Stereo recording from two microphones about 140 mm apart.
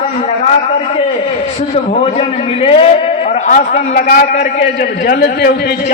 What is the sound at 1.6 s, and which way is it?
A man's voice, 45° left (ahead or behind).